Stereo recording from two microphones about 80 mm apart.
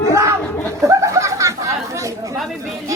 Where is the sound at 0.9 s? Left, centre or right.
Right.